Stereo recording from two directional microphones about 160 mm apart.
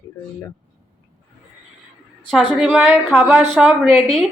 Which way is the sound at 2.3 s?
Centre (ahead or behind).